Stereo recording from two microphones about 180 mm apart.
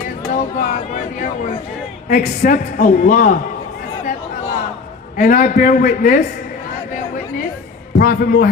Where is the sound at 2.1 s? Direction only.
45° left (ahead or behind).